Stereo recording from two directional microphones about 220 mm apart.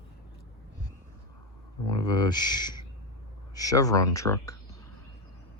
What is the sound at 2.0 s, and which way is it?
Speech, 20° left (ahead or behind).